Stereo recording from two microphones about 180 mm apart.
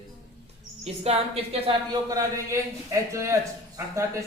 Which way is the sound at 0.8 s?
35° right (ahead or behind).